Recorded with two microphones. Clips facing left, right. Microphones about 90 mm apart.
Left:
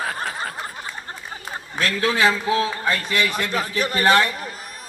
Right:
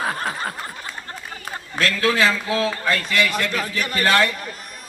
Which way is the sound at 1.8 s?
20° left (ahead or behind).